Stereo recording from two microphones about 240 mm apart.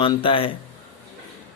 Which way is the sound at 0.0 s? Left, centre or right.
Left.